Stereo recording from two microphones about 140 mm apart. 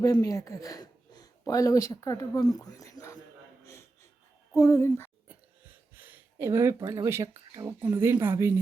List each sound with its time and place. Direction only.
0.0 s speech: 25° left (ahead or behind)
4.5 s speech: 25° left (ahead or behind)
5.9 s speech: 15° right (ahead or behind)